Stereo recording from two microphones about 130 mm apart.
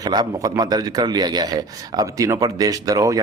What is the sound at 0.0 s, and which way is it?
A man's voice, 30° right (ahead or behind).